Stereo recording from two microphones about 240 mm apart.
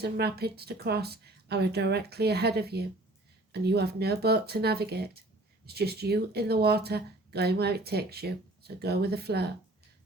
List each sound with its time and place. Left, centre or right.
0.0 s speech: right